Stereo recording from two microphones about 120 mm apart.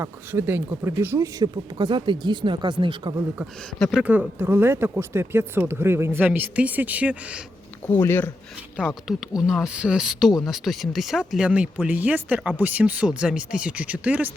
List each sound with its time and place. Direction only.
0.0 s speech: 20° right (ahead or behind)
1.8 s speech: 40° right (ahead or behind)
3.9 s speech: 10° right (ahead or behind)
7.9 s speech: 20° left (ahead or behind)
8.8 s speech: 10° right (ahead or behind)